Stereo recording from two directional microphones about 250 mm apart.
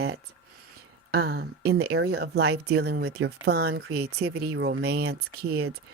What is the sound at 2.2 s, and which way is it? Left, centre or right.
Speech, right.